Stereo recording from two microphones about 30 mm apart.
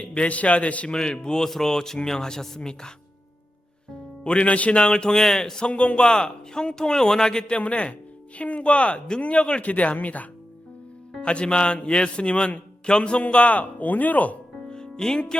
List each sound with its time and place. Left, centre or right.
0.0 s a man's voice: left
0.9 s a man's voice: left
4.2 s a man's voice: left
4.7 s a man's voice: left
5.6 s a man's voice: left
6.1 s a man's voice: left
7.6 s a man's voice: left
9.6 s speech: left
11.2 s a man's voice: left
13.2 s speech: left
14.7 s music: left